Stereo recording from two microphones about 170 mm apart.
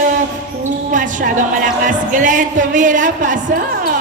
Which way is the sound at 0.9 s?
50° right (ahead or behind).